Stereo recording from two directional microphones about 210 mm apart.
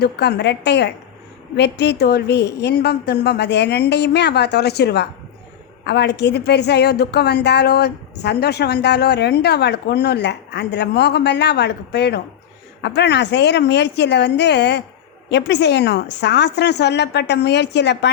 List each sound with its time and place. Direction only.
0.0 s a woman's voice: 50° left (ahead or behind)